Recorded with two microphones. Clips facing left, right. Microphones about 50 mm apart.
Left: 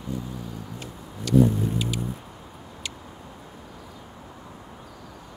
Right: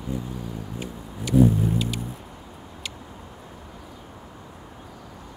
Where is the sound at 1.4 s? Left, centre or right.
Centre.